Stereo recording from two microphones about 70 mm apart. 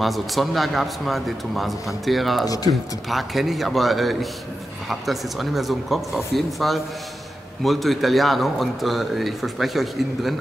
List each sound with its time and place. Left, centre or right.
0.0 s a man's voice: centre
2.4 s speech: left
2.7 s a man's voice: centre